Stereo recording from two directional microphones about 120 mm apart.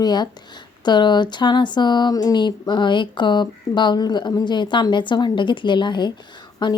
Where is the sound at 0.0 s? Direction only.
35° left (ahead or behind).